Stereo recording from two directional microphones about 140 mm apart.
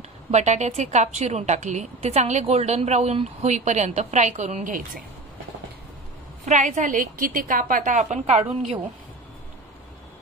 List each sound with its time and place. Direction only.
0.3 s a woman's voice: 55° right (ahead or behind)
6.4 s a woman's voice: 55° right (ahead or behind)